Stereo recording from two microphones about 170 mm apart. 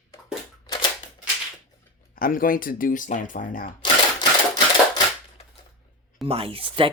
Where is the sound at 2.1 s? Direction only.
55° left (ahead or behind).